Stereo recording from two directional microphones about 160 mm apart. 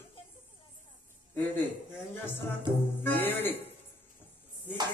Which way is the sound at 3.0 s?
15° left (ahead or behind).